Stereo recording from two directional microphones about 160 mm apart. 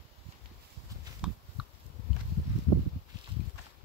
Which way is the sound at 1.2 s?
5° right (ahead or behind).